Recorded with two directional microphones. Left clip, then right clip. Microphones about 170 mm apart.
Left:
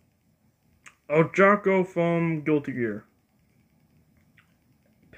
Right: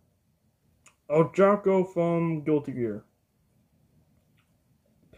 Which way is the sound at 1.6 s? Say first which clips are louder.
Left 1 dB; 10° right (ahead or behind).